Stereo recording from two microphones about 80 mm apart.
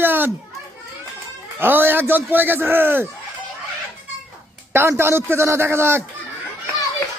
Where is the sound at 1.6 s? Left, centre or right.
Right.